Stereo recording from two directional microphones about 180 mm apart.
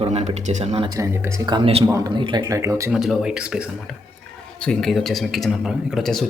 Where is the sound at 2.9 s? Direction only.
Centre (ahead or behind).